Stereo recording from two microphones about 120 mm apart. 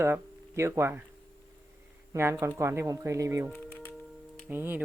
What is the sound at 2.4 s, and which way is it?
Speech, 25° right (ahead or behind).